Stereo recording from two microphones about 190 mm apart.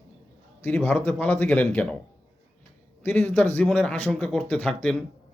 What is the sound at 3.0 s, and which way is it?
Speech, 10° left (ahead or behind).